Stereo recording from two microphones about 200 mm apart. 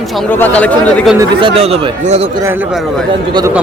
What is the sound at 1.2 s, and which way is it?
Speech, 25° right (ahead or behind).